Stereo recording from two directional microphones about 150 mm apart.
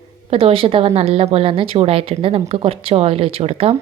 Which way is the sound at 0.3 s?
40° right (ahead or behind).